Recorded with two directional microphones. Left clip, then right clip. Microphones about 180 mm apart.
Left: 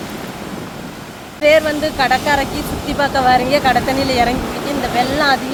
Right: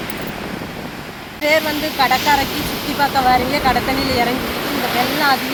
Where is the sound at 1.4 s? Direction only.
30° left (ahead or behind).